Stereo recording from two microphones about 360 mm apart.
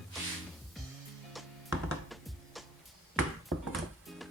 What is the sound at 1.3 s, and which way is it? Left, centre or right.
Music, centre.